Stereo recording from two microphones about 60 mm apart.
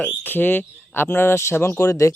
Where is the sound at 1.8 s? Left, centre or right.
Left.